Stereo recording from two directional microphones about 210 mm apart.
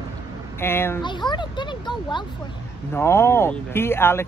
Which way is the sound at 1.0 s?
20° left (ahead or behind).